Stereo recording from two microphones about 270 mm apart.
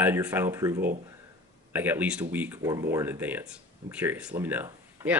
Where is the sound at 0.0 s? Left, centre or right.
Centre.